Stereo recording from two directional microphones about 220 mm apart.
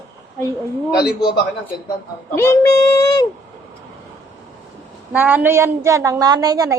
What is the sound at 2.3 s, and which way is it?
Speech, 10° left (ahead or behind).